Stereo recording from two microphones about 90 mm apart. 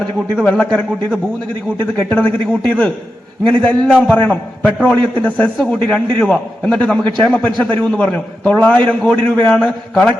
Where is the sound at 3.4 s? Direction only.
15° left (ahead or behind).